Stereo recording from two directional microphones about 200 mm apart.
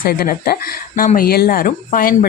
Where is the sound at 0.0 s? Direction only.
50° left (ahead or behind).